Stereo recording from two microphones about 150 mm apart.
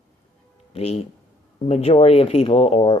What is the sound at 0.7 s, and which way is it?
Speech, 40° left (ahead or behind).